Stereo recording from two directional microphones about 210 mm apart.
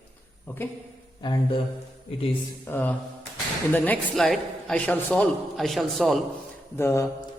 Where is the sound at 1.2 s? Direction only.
20° left (ahead or behind).